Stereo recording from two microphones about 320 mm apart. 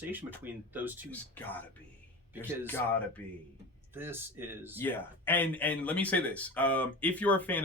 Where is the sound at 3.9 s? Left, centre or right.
Centre.